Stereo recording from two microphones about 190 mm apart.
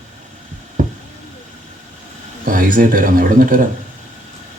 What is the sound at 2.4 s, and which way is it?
Speech, 45° right (ahead or behind).